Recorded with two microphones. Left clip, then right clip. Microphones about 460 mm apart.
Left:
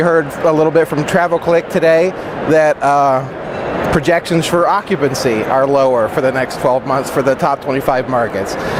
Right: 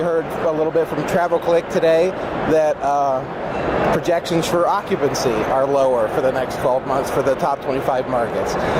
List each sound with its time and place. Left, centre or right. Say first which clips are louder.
0.0 s speech: left 7 dB; left